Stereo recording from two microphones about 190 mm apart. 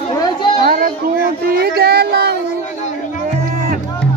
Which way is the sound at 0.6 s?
50° right (ahead or behind).